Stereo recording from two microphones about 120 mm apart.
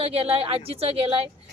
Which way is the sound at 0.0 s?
55° right (ahead or behind).